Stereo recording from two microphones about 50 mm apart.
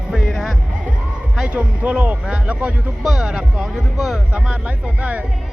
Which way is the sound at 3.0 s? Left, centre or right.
Centre.